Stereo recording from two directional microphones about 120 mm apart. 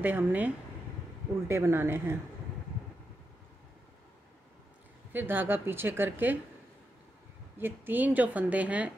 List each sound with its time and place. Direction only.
0.0 s a woman's voice: 15° right (ahead or behind)
1.5 s speech: 20° right (ahead or behind)
5.1 s a woman's voice: 15° right (ahead or behind)
7.5 s a woman's voice: 15° right (ahead or behind)